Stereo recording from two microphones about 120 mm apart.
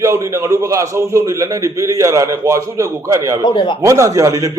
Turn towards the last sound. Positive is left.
turn(degrees=-30)  # may be behind; listen again after turning